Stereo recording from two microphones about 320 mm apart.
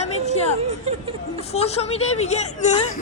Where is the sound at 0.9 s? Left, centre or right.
Centre.